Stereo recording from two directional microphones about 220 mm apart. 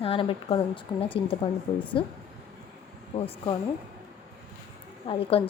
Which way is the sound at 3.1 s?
25° left (ahead or behind).